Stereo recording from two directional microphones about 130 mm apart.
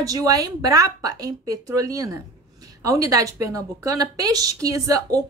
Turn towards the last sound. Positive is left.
turn(degrees=-25)  # may be behind; listen again after turning